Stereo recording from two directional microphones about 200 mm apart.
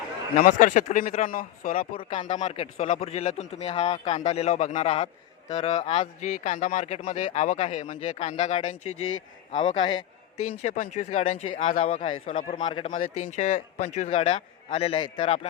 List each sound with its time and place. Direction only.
0.3 s speech: 45° left (ahead or behind)
2.0 s speech: 25° left (ahead or behind)
8.8 s speech: 90° left
9.6 s a man's voice: 25° left (ahead or behind)
10.7 s speech: 40° left (ahead or behind); by 15.2 s 25° left (ahead or behind)